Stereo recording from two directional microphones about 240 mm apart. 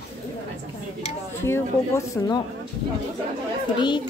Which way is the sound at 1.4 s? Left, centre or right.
Centre.